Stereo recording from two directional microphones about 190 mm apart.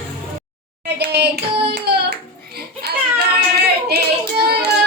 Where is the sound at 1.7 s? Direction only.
60° right (ahead or behind).